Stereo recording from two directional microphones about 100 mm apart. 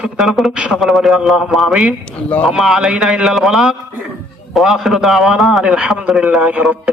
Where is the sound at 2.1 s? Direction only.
15° left (ahead or behind).